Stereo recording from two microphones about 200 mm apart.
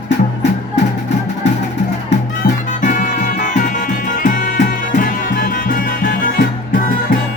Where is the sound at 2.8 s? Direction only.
40° left (ahead or behind).